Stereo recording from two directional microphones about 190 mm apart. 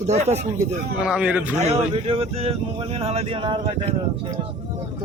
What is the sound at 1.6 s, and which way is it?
Speech, 30° right (ahead or behind).